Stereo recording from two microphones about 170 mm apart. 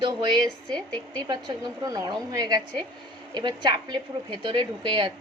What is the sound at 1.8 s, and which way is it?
A woman's voice, 20° right (ahead or behind).